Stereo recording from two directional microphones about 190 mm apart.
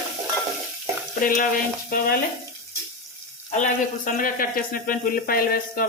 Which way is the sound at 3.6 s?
45° left (ahead or behind).